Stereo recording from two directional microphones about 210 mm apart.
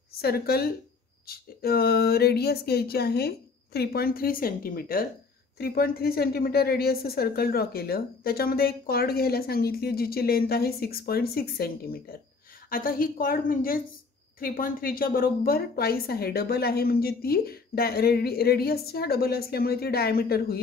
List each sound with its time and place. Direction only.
0.2 s a woman's voice: 50° left (ahead or behind)